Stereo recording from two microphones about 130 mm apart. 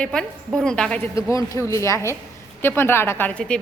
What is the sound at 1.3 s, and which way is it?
A woman's voice, 25° left (ahead or behind).